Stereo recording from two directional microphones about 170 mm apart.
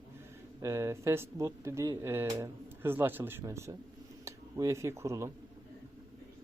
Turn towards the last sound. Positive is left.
turn(degrees=-15)  # may be behind; listen again after turning